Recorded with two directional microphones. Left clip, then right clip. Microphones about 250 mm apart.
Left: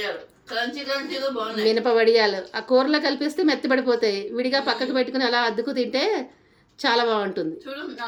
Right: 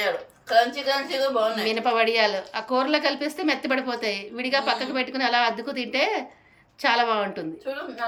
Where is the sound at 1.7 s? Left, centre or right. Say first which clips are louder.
Left 8 dB; centre.